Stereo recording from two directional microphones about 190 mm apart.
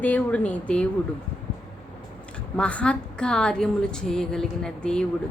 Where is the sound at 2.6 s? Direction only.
5° left (ahead or behind).